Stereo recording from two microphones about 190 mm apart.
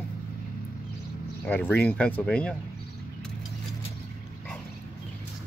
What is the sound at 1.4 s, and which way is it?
Speech, 10° left (ahead or behind).